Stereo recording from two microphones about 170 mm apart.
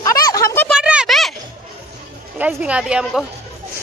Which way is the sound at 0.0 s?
20° left (ahead or behind).